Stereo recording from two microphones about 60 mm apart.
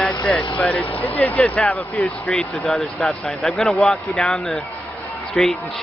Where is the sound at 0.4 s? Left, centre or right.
Left.